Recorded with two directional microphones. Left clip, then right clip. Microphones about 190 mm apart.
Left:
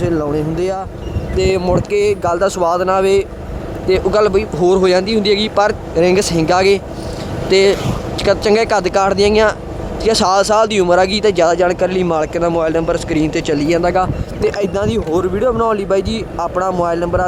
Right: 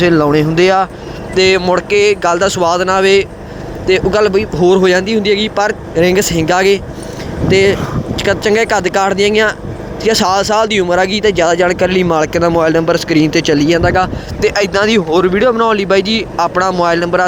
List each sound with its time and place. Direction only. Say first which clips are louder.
0.0 s speech: right 7 dB; 25° right (ahead or behind)